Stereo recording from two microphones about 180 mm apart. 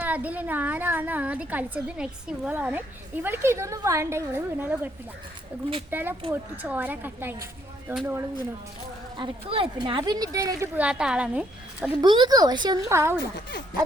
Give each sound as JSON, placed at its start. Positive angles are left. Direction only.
{"t": 0.0, "sound": "a woman's voice", "side_deg": -10}
{"t": 5.9, "sound": "a woman's voice", "side_deg": -10}
{"t": 9.1, "sound": "a woman's voice", "side_deg": -30}
{"t": 10.8, "sound": "a woman's voice", "side_deg": -5}
{"t": 11.9, "sound": "a woman's voice", "side_deg": -25}